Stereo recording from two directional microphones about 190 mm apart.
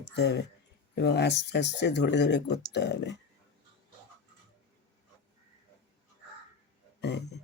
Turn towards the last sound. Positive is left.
turn(degrees=60)  # may be behind; listen again after turning